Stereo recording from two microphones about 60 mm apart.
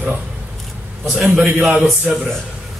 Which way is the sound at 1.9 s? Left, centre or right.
Centre.